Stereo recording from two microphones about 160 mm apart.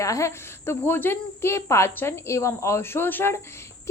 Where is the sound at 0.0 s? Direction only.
20° left (ahead or behind).